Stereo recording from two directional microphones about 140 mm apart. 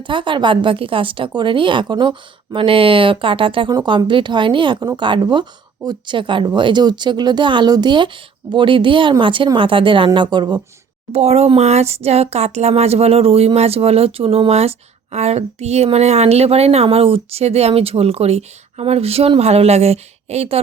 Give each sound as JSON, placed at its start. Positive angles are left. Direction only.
{"t": 0.0, "sound": "speech", "side_deg": -35}
{"t": 11.1, "sound": "speech", "side_deg": -50}